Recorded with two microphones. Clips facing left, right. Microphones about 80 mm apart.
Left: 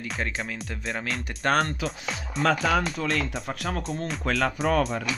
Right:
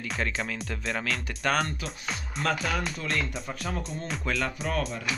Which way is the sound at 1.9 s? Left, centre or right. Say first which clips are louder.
Left 3 dB; centre.